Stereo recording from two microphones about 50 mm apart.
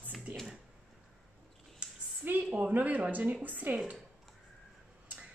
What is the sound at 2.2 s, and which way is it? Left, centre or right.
A woman's voice, right.